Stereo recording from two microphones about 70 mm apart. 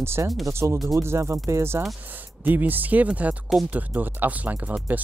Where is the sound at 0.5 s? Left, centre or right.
Right.